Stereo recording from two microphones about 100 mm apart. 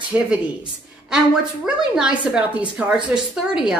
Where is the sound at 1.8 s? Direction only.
10° right (ahead or behind).